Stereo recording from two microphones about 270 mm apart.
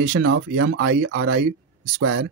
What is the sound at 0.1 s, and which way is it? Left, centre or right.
Speech, right.